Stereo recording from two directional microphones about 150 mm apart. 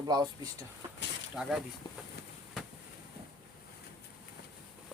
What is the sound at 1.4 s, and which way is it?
Speech, 5° right (ahead or behind).